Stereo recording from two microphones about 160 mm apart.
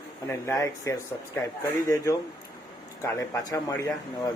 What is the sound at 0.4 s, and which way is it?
Speech, 20° left (ahead or behind).